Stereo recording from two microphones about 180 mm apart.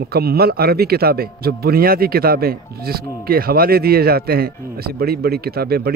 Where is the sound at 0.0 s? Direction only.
60° right (ahead or behind).